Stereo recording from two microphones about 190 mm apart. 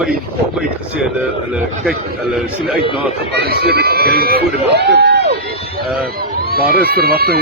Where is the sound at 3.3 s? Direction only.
55° right (ahead or behind).